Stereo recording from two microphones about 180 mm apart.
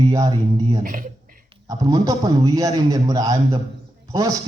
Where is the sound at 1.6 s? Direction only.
20° right (ahead or behind).